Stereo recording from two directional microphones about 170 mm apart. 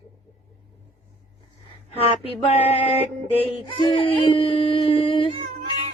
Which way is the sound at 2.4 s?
35° left (ahead or behind).